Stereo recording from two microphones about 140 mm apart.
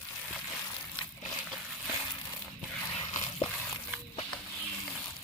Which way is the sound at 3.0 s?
35° left (ahead or behind).